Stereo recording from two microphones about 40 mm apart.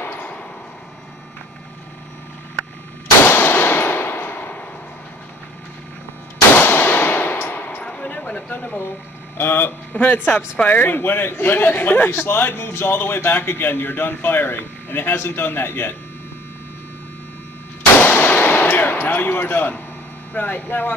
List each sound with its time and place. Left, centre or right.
3.3 s a sound: left
6.5 s gunshot: left
7.8 s a sound: left
8.4 s a sound: left
9.4 s a man's voice: left
9.9 s speech: left
10.8 s speech: left
12.1 s a man's voice: left
17.9 s clang: left
20.3 s speech: left